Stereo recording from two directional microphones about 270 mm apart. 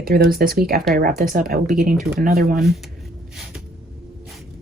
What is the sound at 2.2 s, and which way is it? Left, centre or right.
Speech, right.